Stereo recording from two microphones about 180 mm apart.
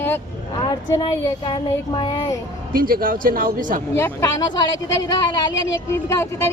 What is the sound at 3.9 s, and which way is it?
Speech, 15° left (ahead or behind).